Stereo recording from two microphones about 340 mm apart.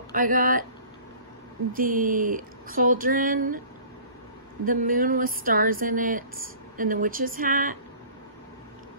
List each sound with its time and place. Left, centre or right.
0.1 s speech: right
1.7 s speech: right
4.6 s speech: right